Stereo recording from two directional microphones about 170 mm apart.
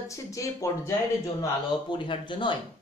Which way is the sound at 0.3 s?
20° left (ahead or behind).